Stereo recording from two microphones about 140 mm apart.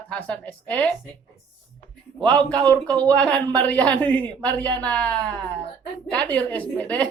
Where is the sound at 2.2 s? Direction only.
5° left (ahead or behind).